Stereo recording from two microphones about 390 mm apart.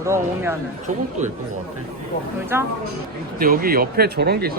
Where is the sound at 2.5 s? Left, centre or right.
Centre.